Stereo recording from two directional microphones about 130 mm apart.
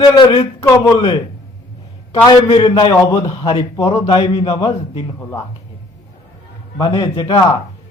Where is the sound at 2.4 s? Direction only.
35° left (ahead or behind).